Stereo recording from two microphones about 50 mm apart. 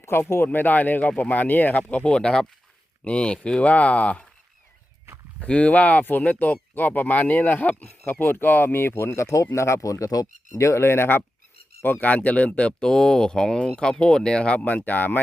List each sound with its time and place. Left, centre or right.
0.0 s speech: left
0.4 s speech: left
2.0 s speech: centre
3.6 s speech: left
5.4 s speech: left
9.1 s speech: left
10.6 s speech: left
11.8 s speech: left
12.1 s speech: left
12.8 s speech: centre; by 14.8 s left
14.8 s speech: left